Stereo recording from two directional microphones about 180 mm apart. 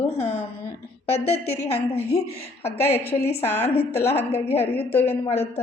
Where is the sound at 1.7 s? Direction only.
35° left (ahead or behind).